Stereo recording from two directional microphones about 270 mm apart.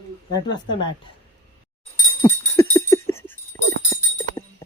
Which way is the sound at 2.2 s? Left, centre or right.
Centre.